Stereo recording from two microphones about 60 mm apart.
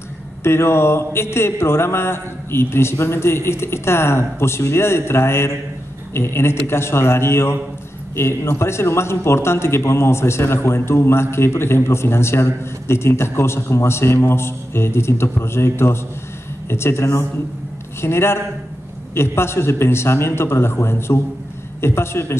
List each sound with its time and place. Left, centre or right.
0.4 s a man's voice: left